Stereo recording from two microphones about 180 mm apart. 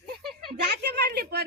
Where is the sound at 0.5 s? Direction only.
65° right (ahead or behind).